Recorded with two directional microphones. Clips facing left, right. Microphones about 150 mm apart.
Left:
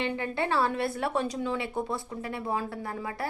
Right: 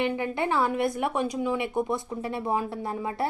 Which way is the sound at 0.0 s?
15° right (ahead or behind).